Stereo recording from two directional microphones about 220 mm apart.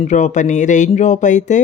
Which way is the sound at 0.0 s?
35° left (ahead or behind).